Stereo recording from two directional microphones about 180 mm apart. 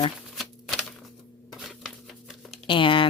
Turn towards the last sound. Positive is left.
turn(degrees=30)  # may be behind; listen again after turning